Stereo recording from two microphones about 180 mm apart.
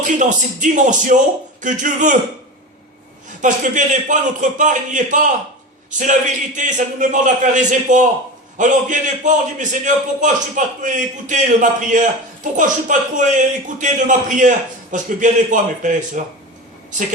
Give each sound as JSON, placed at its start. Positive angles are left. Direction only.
{"t": 0.0, "sound": "a man's voice", "side_deg": -45}
{"t": 3.4, "sound": "a man's voice", "side_deg": -45}